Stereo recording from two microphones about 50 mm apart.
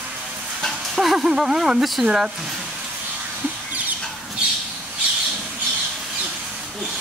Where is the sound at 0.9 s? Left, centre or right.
Centre.